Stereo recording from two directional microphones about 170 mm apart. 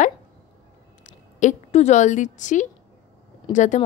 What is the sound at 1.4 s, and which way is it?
Speech, 45° left (ahead or behind).